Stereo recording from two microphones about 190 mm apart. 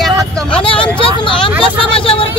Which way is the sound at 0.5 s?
25° left (ahead or behind).